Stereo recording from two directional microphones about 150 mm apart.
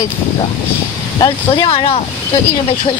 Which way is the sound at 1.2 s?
35° left (ahead or behind).